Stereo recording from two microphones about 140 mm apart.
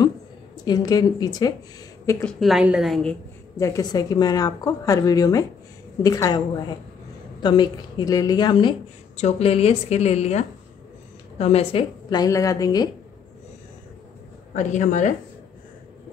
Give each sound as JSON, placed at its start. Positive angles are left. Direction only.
{"t": 0.7, "sound": "a woman's voice", "side_deg": 30}
{"t": 2.2, "sound": "a woman's voice", "side_deg": 0}
{"t": 3.5, "sound": "a woman's voice", "side_deg": 25}
{"t": 7.4, "sound": "a woman's voice", "side_deg": 35}
{"t": 9.1, "sound": "a woman's voice", "side_deg": 50}
{"t": 12.1, "sound": "a woman's voice", "side_deg": 25}
{"t": 14.5, "sound": "a woman's voice", "side_deg": 60}